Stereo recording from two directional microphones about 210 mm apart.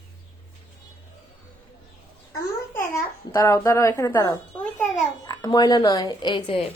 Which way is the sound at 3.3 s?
15° left (ahead or behind).